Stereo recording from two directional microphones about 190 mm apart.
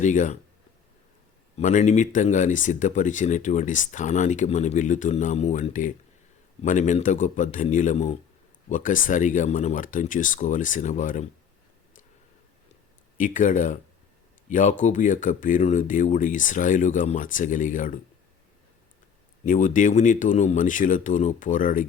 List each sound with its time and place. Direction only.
0.0 s speech: 40° left (ahead or behind)
1.5 s speech: 40° left (ahead or behind)
13.1 s speech: 45° left (ahead or behind)
19.5 s speech: 45° left (ahead or behind)